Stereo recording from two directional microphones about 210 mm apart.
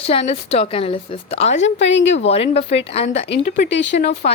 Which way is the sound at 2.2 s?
30° left (ahead or behind).